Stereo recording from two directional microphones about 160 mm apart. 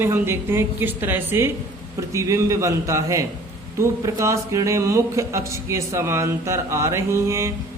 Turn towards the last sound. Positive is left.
turn(degrees=-20)  # may be behind; listen again after turning